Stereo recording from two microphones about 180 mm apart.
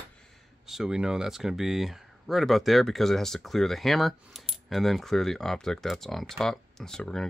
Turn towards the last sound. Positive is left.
turn(degrees=5)  # may be behind; listen again after turning